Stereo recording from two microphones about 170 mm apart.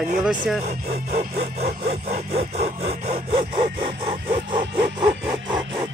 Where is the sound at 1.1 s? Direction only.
40° right (ahead or behind).